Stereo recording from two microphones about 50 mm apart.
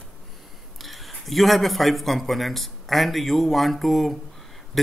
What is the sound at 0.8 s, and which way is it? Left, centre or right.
Speech, centre.